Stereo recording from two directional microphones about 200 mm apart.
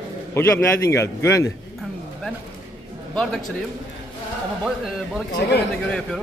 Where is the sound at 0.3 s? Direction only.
10° left (ahead or behind).